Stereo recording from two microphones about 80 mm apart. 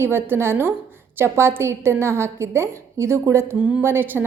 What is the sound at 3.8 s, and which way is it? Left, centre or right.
Speech, right.